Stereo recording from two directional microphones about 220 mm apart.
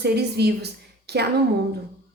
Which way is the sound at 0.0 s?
50° right (ahead or behind).